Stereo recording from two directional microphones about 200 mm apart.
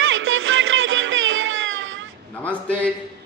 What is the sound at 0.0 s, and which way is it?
Music, 80° right.